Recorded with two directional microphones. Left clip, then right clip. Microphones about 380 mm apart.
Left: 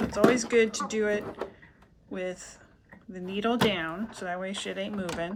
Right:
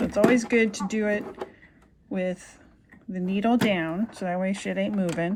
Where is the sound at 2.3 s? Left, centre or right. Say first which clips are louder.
Right 2 dB; right.